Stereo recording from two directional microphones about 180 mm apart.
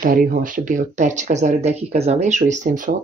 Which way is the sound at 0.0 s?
50° right (ahead or behind).